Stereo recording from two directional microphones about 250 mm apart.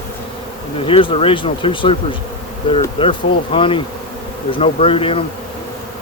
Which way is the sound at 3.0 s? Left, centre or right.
Left.